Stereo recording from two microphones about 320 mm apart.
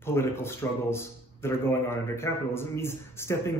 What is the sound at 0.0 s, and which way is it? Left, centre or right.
A man's voice, centre.